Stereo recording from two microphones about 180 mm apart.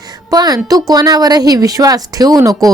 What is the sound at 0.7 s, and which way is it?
A woman's voice, 20° right (ahead or behind).